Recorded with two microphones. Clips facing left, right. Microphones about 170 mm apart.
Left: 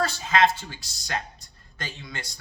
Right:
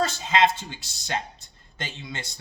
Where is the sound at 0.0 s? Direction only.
20° right (ahead or behind).